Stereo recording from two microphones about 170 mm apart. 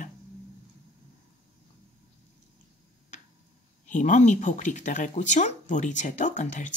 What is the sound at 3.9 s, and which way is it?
Speech, 45° left (ahead or behind).